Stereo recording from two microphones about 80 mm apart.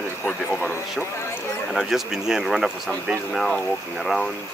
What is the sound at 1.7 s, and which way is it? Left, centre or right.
Speech, centre.